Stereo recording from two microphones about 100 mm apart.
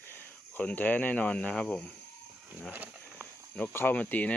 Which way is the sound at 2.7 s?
20° right (ahead or behind).